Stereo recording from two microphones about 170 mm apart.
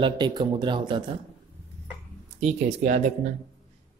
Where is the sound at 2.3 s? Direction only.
40° right (ahead or behind).